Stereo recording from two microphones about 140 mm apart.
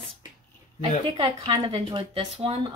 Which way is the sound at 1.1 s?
40° right (ahead or behind).